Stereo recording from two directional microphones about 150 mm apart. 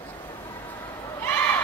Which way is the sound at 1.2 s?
15° left (ahead or behind).